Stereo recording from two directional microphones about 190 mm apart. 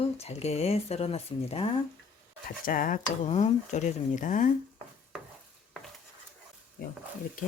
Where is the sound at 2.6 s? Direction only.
45° left (ahead or behind).